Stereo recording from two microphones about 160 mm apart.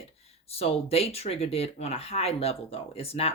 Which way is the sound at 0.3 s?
40° left (ahead or behind).